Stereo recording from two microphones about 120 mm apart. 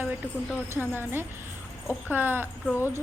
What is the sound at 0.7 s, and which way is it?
A woman's voice, 20° right (ahead or behind).